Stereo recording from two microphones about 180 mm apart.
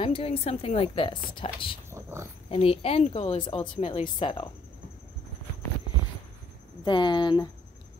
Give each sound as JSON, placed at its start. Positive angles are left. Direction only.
{"t": 0.0, "sound": "speech", "side_deg": 30}
{"t": 1.9, "sound": "wild animals", "side_deg": -15}
{"t": 2.5, "sound": "speech", "side_deg": 35}
{"t": 3.6, "sound": "a woman's voice", "side_deg": 45}
{"t": 3.9, "sound": "speech", "side_deg": 30}
{"t": 6.8, "sound": "speech", "side_deg": 25}